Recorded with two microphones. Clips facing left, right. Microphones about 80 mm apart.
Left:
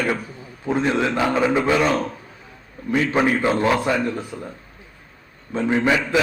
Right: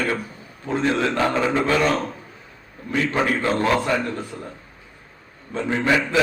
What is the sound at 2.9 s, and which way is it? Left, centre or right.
Speech, centre.